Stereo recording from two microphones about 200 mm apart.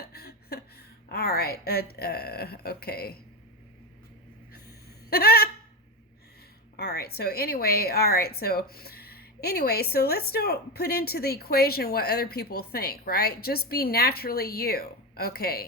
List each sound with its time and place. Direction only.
0.0 s a woman's voice: 50° left (ahead or behind)
5.0 s a sound: 50° left (ahead or behind)
6.7 s speech: 50° left (ahead or behind)